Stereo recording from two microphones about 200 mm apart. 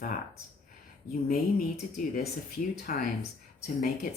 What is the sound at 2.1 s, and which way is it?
Speech, 45° left (ahead or behind).